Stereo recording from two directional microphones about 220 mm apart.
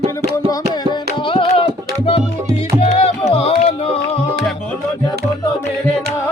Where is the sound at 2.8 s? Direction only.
30° left (ahead or behind).